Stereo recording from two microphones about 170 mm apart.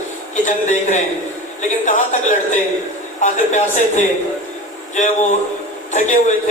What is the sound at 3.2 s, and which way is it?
Speech, 45° left (ahead or behind).